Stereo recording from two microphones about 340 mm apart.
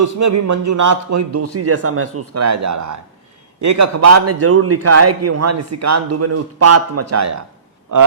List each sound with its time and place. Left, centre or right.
0.0 s a man's voice: right